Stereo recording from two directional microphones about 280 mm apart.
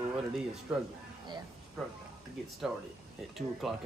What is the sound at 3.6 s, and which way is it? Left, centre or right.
Speech, centre.